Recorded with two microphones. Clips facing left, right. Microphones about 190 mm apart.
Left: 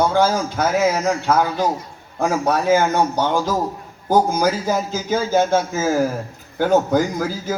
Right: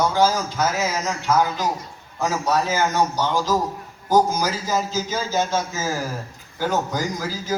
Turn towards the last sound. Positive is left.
turn(degrees=55)  # may be behind; listen again after turning